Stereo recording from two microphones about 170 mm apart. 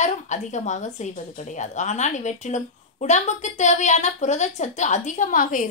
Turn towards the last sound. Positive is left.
turn(degrees=50)  # may be behind; listen again after turning